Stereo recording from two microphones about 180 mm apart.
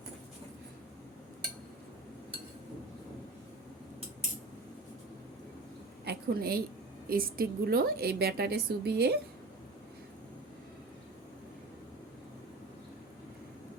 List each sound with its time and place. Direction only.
6.1 s a woman's voice: 55° right (ahead or behind)